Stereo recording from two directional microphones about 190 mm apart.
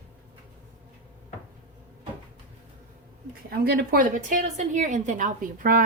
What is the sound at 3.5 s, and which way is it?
A woman's voice, 55° right (ahead or behind).